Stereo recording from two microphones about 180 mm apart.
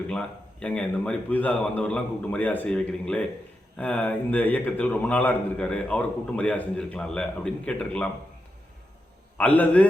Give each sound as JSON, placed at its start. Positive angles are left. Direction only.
{"t": 0.1, "sound": "a man's voice", "side_deg": 5}
{"t": 9.4, "sound": "a man's voice", "side_deg": 10}